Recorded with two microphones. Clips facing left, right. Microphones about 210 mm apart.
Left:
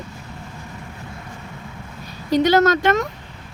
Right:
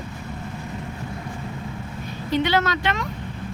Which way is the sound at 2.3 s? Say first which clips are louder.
Left 6 dB; 40° left (ahead or behind).